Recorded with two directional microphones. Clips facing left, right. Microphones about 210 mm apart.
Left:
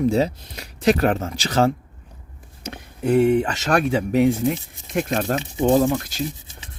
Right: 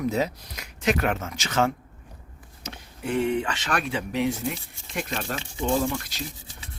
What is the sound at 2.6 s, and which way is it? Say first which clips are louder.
Speech: left 9 dB; 50° left (ahead or behind).